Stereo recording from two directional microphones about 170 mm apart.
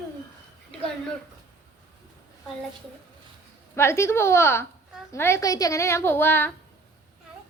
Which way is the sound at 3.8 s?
15° left (ahead or behind).